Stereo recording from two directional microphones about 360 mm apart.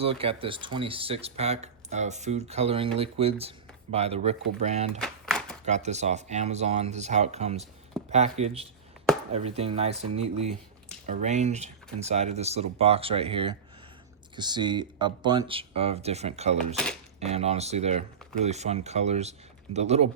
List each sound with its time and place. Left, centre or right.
0.0 s speech: centre
4.9 s a sound: centre
5.6 s speech: centre
16.7 s speech: centre
17.2 s speech: centre